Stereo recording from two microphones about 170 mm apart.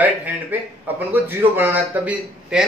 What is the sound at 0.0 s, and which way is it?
A man's voice, 10° right (ahead or behind).